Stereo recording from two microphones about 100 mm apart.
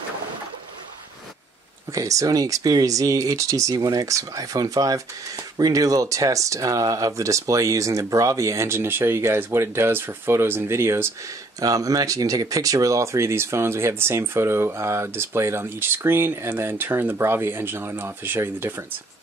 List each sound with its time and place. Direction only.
1.9 s speech: 35° right (ahead or behind)